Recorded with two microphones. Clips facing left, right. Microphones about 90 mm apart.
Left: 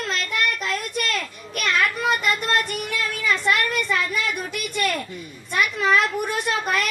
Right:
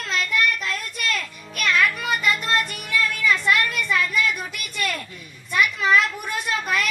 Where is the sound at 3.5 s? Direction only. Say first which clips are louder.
Even; 60° left (ahead or behind).